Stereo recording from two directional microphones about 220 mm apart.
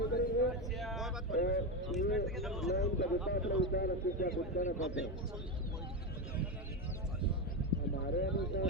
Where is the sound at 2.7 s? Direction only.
50° left (ahead or behind).